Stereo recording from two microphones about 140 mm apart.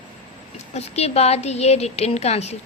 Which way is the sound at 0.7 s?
50° left (ahead or behind).